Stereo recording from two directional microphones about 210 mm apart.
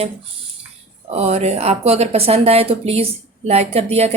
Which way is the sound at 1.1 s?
30° right (ahead or behind).